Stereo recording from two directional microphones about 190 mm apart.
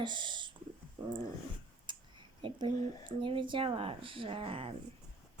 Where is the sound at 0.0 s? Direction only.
25° right (ahead or behind).